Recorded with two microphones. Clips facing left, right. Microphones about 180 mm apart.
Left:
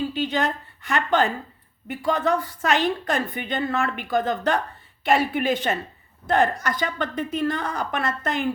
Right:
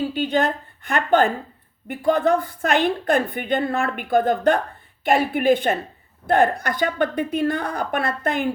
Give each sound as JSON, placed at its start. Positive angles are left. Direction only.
{"t": 0.1, "sound": "a woman's voice", "side_deg": -55}